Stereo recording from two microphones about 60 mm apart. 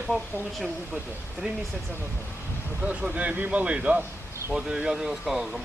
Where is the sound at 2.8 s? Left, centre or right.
Centre.